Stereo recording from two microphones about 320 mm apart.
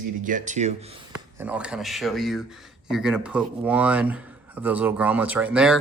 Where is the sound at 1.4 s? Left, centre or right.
Centre.